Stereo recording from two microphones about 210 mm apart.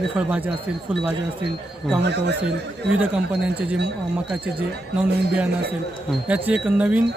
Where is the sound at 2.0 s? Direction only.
55° right (ahead or behind).